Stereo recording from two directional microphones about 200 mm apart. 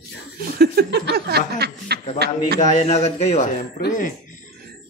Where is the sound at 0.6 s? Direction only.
50° right (ahead or behind).